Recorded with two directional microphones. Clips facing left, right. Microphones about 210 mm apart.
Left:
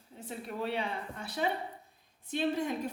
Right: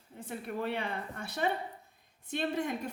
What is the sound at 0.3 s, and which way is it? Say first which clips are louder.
Speech: right 1 dB; 55° right (ahead or behind).